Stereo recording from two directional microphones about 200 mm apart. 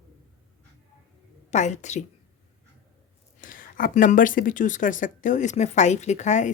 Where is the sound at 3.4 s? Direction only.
45° left (ahead or behind).